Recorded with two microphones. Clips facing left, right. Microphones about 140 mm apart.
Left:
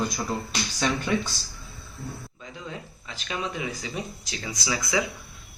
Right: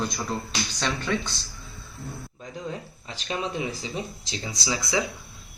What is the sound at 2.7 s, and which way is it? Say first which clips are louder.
Speech: right 2 dB; 35° right (ahead or behind).